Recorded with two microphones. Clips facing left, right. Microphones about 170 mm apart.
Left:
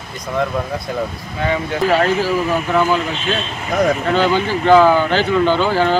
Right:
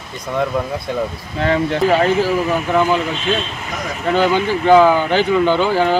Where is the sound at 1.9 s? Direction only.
15° right (ahead or behind).